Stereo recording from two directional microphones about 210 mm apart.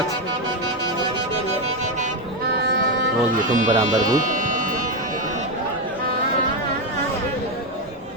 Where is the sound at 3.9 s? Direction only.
35° right (ahead or behind).